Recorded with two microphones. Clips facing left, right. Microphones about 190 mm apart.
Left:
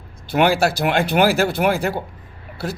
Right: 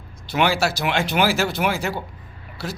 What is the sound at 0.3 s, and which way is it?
Speech, 55° left (ahead or behind).